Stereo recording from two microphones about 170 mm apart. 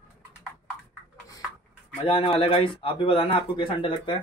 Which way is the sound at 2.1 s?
30° left (ahead or behind).